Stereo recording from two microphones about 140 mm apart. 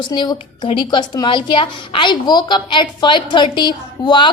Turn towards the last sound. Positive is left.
turn(degrees=30)  # may be behind; listen again after turning